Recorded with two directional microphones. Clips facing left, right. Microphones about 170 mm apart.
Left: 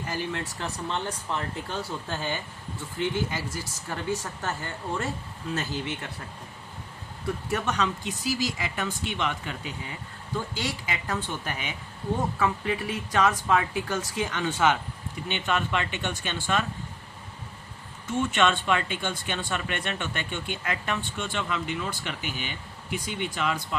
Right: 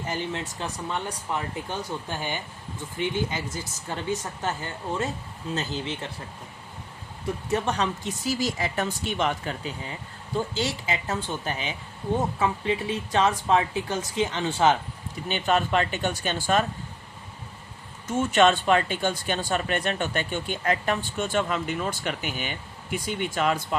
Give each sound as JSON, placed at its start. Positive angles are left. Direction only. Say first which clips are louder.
{"t": 0.1, "sound": "speech", "louder": "right 1 dB", "side_deg": -20}
{"t": 7.5, "sound": "speech", "louder": "right 3 dB", "side_deg": -30}
{"t": 8.0, "sound": "speech", "louder": "right 2 dB", "side_deg": -45}
{"t": 10.3, "sound": "speech", "louder": "right 4 dB", "side_deg": -25}
{"t": 18.1, "sound": "speech", "louder": "right 4 dB", "side_deg": -40}